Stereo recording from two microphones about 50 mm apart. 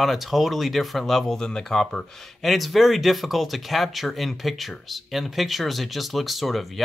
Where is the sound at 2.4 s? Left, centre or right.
Centre.